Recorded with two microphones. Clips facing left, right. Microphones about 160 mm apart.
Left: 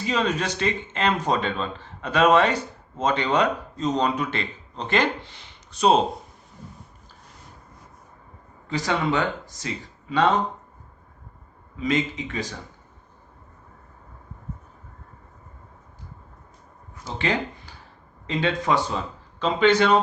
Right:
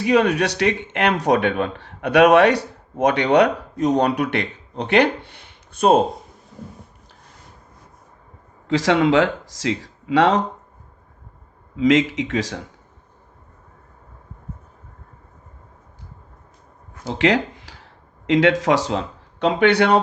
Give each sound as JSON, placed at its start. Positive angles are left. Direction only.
{"t": 0.0, "sound": "speech", "side_deg": -65}
{"t": 8.6, "sound": "speech", "side_deg": -90}
{"t": 11.8, "sound": "speech", "side_deg": -90}
{"t": 17.0, "sound": "a sound", "side_deg": -80}
{"t": 18.3, "sound": "speech", "side_deg": -85}